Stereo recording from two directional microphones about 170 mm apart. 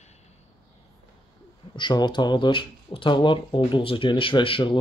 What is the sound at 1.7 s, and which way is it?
Speech, 25° left (ahead or behind).